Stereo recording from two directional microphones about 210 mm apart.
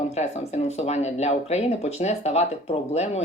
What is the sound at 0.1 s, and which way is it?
Speech, 30° left (ahead or behind).